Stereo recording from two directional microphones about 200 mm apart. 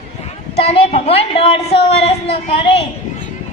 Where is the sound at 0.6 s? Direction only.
30° left (ahead or behind).